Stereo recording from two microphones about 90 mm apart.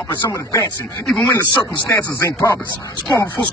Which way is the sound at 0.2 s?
40° left (ahead or behind).